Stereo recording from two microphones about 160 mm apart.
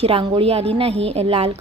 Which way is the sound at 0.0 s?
35° right (ahead or behind).